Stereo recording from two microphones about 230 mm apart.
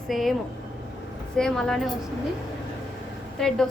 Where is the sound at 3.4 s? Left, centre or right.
Centre.